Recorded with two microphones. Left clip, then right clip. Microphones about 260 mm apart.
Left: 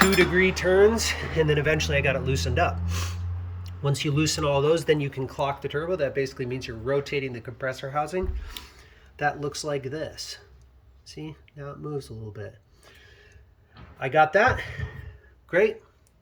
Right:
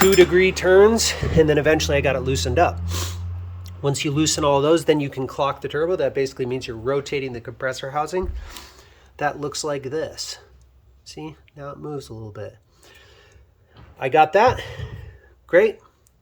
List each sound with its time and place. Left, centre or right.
0.1 s speech: centre
14.0 s speech: centre